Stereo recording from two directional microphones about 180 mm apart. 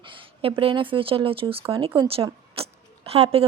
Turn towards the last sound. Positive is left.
turn(degrees=-35)  # may be behind; listen again after turning